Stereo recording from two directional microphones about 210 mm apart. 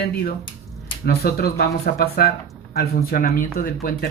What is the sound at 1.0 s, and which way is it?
Speech, 45° left (ahead or behind).